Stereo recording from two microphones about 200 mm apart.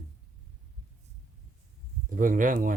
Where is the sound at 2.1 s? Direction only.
40° right (ahead or behind).